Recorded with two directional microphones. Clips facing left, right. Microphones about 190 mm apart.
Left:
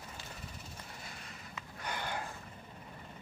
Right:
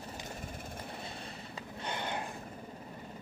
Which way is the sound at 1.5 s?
25° right (ahead or behind).